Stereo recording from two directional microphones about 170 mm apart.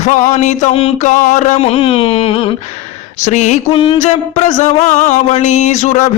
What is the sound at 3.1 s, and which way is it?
Speech, 40° left (ahead or behind).